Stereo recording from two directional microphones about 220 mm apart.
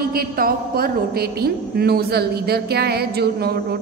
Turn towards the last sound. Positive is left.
turn(degrees=-45)  # may be behind; listen again after turning